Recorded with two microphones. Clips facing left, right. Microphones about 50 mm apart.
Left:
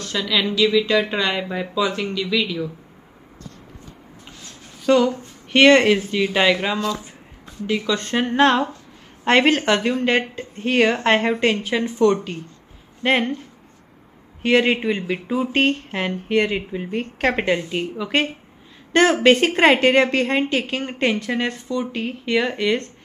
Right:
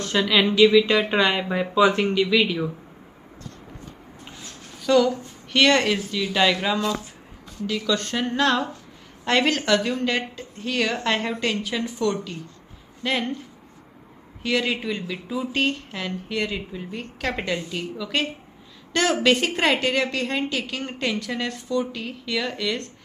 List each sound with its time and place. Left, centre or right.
0.0 s a sound: right
0.8 s speech: right
1.8 s speech: right
2.2 s speech: centre
4.8 s speech: left
6.2 s speech: centre
7.6 s a woman's voice: left
14.4 s a woman's voice: left